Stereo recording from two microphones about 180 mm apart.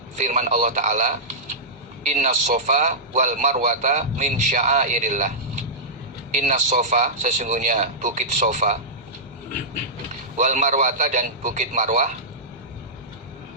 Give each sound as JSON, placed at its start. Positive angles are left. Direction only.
{"t": 0.2, "sound": "a man's voice", "side_deg": -40}
{"t": 6.3, "sound": "a man's voice", "side_deg": -40}
{"t": 10.3, "sound": "a man's voice", "side_deg": -45}